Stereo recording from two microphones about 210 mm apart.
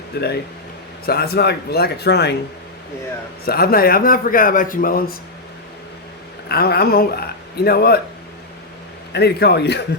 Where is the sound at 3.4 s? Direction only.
45° left (ahead or behind).